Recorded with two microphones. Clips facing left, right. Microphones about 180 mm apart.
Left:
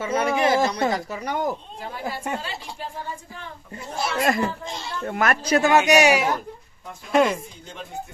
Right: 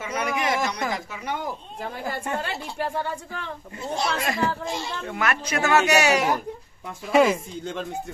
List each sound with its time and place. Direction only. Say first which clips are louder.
0.0 s speech: left 5 dB; 30° left (ahead or behind)
1.8 s a woman's voice: right 1 dB; 50° right (ahead or behind)
2.4 s speech: right 5 dB; 70° right (ahead or behind)
3.9 s speech: left 2 dB; centre (ahead or behind)
5.0 s speech: left 6 dB; 45° left (ahead or behind)
5.6 s speech: left 2 dB; 15° left (ahead or behind)
7.1 s speech: right 1 dB; 5° right (ahead or behind)